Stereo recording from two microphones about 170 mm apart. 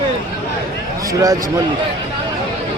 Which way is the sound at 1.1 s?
20° right (ahead or behind).